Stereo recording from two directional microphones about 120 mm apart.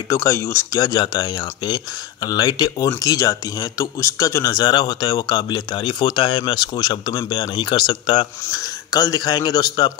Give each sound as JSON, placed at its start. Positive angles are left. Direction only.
{"t": 0.1, "sound": "speech", "side_deg": 25}